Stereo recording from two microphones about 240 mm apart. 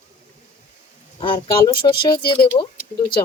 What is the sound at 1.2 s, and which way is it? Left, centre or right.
Speech, centre.